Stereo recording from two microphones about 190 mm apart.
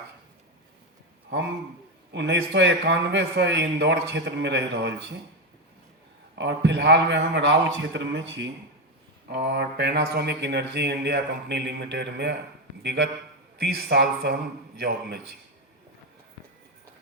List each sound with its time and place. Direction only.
1.3 s a man's voice: 65° right (ahead or behind)
6.3 s a man's voice: 65° right (ahead or behind)
9.3 s a man's voice: 60° right (ahead or behind)